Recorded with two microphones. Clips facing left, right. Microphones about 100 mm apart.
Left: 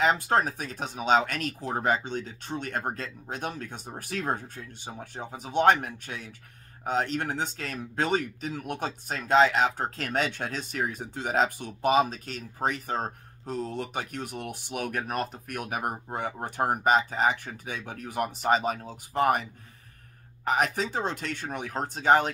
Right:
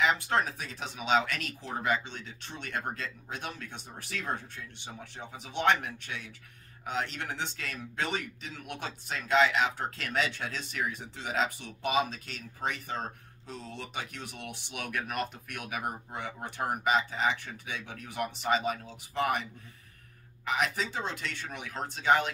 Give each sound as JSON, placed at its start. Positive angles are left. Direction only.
{"t": 0.0, "sound": "speech", "side_deg": 40}
{"t": 20.4, "sound": "speech", "side_deg": 45}